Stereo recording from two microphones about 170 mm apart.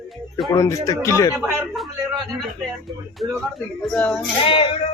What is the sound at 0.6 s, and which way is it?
Speech, 20° left (ahead or behind).